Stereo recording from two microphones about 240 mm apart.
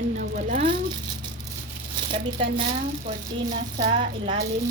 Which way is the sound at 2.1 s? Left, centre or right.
Right.